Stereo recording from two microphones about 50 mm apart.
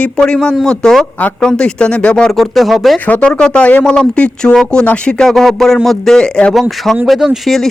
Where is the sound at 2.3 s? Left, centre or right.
Centre.